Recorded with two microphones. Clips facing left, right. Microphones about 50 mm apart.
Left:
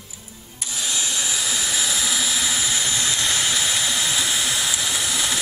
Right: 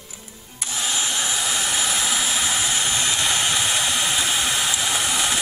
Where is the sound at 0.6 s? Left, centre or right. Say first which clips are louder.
Right 2 dB; right.